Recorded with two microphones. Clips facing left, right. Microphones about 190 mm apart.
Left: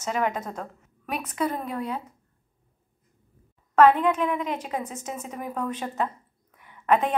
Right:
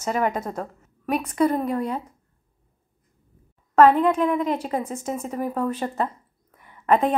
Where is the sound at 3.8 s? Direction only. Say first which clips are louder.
Right 2 dB; 40° right (ahead or behind).